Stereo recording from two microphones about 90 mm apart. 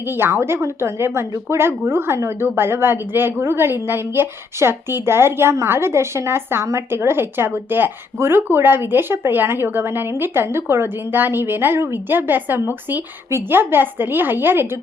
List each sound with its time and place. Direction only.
0.0 s a woman's voice: 25° right (ahead or behind)